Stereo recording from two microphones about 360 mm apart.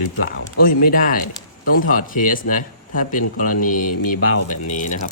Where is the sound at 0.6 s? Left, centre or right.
Left.